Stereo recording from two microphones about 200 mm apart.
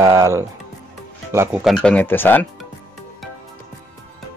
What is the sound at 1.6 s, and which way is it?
Speech, 5° left (ahead or behind).